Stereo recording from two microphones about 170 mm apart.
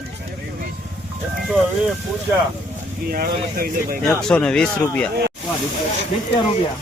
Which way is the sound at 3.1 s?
60° right (ahead or behind).